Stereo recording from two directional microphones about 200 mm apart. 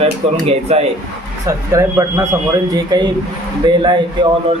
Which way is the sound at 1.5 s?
15° right (ahead or behind).